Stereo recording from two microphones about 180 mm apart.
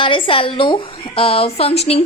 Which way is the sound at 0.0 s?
30° left (ahead or behind).